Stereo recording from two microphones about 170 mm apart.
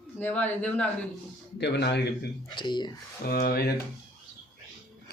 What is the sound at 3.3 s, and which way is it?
Speech, 65° left (ahead or behind).